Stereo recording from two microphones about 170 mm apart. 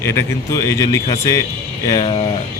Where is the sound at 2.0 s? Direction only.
35° left (ahead or behind).